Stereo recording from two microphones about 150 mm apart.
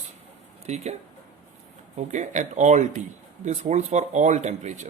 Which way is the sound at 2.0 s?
55° right (ahead or behind).